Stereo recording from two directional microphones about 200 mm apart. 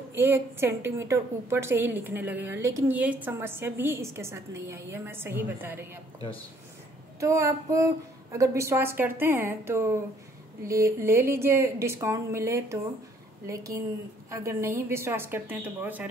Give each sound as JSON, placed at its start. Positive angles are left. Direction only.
{"t": 0.1, "sound": "a woman's voice", "side_deg": -10}
{"t": 7.2, "sound": "a woman's voice", "side_deg": -15}